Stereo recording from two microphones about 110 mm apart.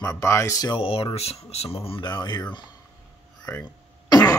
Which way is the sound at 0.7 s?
55° left (ahead or behind).